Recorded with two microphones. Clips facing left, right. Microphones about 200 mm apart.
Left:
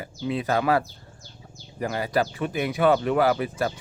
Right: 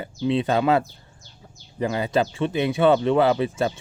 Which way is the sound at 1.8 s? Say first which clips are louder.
Right 3 dB; 25° right (ahead or behind).